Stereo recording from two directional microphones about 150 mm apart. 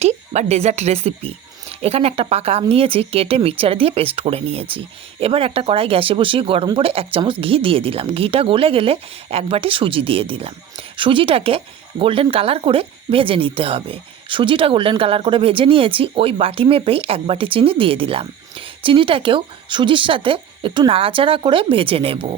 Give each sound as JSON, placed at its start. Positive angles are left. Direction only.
{"t": 0.0, "sound": "speech", "side_deg": -45}